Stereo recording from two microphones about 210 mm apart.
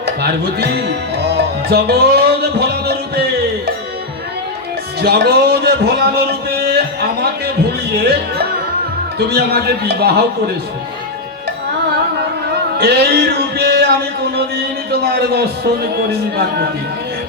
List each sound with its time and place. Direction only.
0.9 s music: 50° right (ahead or behind)
4.9 s a sound: 50° right (ahead or behind)
9.1 s a man's voice: 50° right (ahead or behind)
12.7 s music: 50° right (ahead or behind)